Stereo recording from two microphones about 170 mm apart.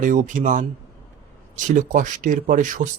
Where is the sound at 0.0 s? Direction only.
50° right (ahead or behind).